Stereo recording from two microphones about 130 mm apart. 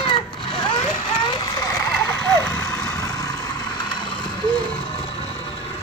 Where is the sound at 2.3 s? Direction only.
15° left (ahead or behind).